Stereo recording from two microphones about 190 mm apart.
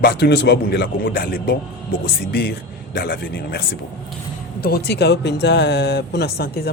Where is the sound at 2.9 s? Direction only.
55° left (ahead or behind).